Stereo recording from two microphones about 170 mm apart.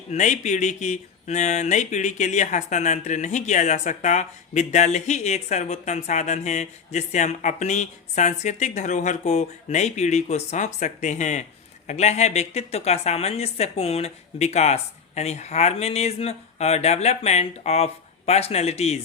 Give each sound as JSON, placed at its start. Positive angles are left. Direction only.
{"t": 0.1, "sound": "a woman's voice", "side_deg": 45}